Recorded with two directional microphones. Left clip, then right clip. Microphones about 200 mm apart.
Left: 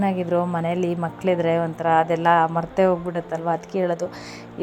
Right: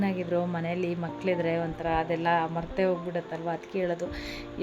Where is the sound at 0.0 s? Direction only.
20° left (ahead or behind).